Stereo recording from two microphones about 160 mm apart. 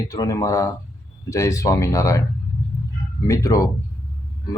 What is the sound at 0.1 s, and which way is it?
Speech, 20° left (ahead or behind).